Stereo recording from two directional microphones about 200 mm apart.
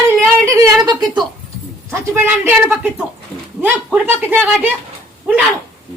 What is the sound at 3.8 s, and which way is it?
Speech, 5° right (ahead or behind).